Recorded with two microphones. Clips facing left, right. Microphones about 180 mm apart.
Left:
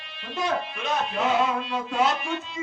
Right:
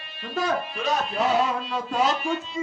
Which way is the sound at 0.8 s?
40° right (ahead or behind).